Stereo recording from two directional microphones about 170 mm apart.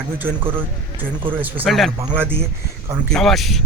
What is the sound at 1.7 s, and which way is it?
Speech, centre (ahead or behind).